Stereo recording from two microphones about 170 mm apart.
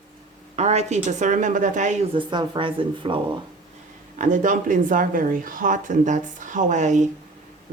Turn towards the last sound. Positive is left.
turn(degrees=-45)  # may be behind; listen again after turning